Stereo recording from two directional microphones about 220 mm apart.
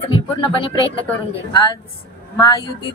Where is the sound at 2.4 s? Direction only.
20° left (ahead or behind).